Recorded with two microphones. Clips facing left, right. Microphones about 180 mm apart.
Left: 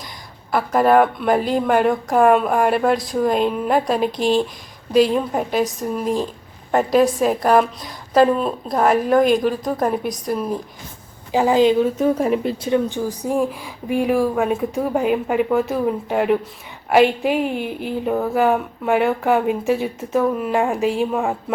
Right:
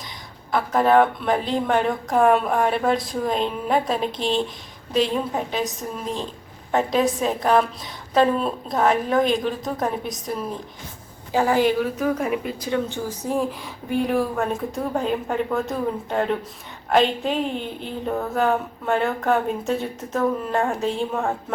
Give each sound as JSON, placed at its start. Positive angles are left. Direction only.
{"t": 0.5, "sound": "a woman's voice", "side_deg": 5}
{"t": 6.7, "sound": "a woman's voice", "side_deg": 5}
{"t": 8.7, "sound": "a woman's voice", "side_deg": 5}
{"t": 11.3, "sound": "a woman's voice", "side_deg": 15}
{"t": 12.7, "sound": "a woman's voice", "side_deg": 15}